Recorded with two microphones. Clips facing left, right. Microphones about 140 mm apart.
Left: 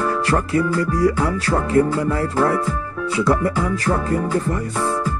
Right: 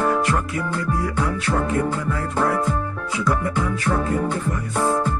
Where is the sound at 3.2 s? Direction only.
30° left (ahead or behind).